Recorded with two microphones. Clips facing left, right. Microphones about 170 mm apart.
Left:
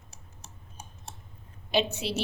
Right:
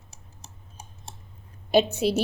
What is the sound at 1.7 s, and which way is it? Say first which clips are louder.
Speech: right 7 dB; 45° right (ahead or behind).